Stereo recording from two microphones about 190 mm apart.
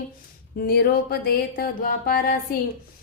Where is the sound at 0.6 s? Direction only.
55° left (ahead or behind).